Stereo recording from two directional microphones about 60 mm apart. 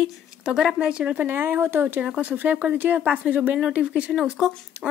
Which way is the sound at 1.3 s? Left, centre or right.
Right.